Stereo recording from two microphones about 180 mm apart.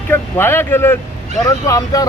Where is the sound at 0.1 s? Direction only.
15° left (ahead or behind).